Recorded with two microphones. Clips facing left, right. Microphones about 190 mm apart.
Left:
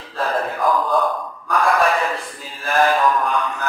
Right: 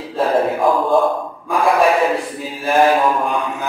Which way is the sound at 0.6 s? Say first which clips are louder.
Right 4 dB; 25° right (ahead or behind).